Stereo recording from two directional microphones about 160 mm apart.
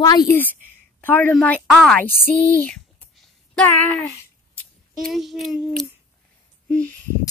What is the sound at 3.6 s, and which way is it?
Speech, 10° left (ahead or behind).